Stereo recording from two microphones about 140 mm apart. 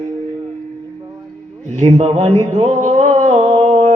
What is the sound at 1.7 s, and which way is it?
Speech, 55° right (ahead or behind).